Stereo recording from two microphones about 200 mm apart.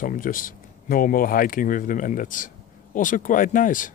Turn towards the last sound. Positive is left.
turn(degrees=40)  # may be behind; listen again after turning